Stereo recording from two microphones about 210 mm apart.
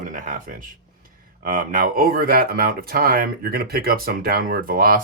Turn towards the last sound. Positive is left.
turn(degrees=-45)  # may be behind; listen again after turning